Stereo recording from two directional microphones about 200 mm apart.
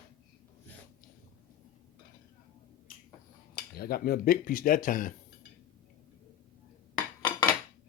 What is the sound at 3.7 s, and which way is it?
Speech, 50° left (ahead or behind).